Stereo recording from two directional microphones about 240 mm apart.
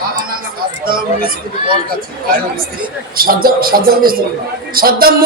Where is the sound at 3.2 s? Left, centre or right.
Right.